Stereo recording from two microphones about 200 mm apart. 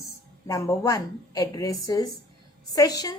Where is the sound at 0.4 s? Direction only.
15° left (ahead or behind).